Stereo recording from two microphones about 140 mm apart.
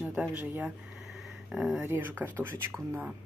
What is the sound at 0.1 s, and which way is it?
Speech, 10° right (ahead or behind).